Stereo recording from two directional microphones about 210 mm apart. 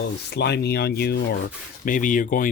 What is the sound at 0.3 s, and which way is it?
Speech, 50° left (ahead or behind).